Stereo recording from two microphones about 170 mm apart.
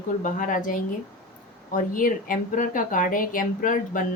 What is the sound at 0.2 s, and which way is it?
Speech, 50° left (ahead or behind).